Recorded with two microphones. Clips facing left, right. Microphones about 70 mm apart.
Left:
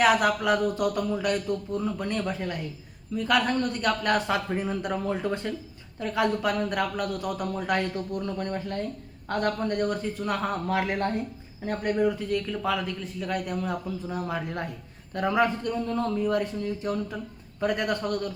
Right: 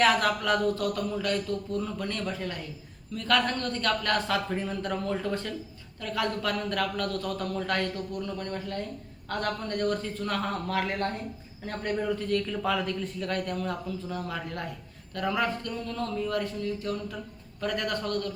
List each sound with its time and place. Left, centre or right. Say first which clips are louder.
0.0 s a man's voice: left 2 dB; centre